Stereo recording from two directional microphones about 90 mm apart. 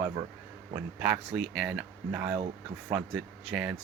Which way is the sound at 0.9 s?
15° right (ahead or behind).